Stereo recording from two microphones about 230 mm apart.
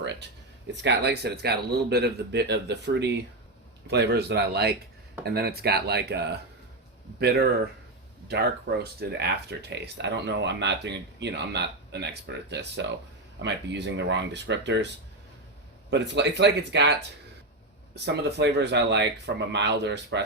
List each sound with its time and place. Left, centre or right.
0.0 s a sound: right
0.8 s speech: right
8.3 s speech: right
15.9 s speech: right
17.9 s speech: right